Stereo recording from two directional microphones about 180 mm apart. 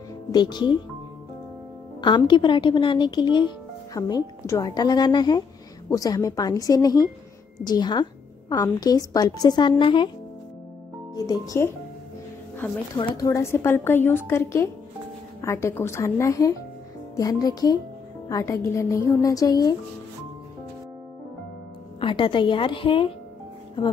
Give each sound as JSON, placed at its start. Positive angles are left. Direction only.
{"t": 0.3, "sound": "speech", "side_deg": 25}
{"t": 2.0, "sound": "speech", "side_deg": 25}
{"t": 11.1, "sound": "speech", "side_deg": 20}
{"t": 12.9, "sound": "a woman's voice", "side_deg": 20}
{"t": 22.0, "sound": "speech", "side_deg": 30}